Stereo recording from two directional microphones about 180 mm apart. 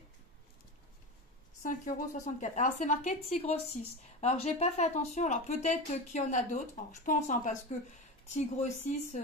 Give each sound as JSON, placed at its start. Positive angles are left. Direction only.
{"t": 1.6, "sound": "a woman's voice", "side_deg": 45}